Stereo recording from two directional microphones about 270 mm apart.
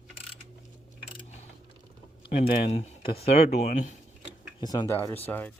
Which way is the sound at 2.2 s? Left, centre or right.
Left.